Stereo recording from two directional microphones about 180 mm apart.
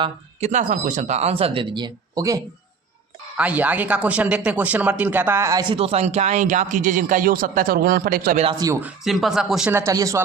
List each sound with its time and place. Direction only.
0.0 s speech: 40° right (ahead or behind); by 2.4 s 20° right (ahead or behind)
3.3 s speech: 10° right (ahead or behind); by 8.4 s 50° right (ahead or behind)
8.5 s speech: 20° right (ahead or behind)
8.8 s speech: centre (ahead or behind)
9.7 s speech: 15° right (ahead or behind)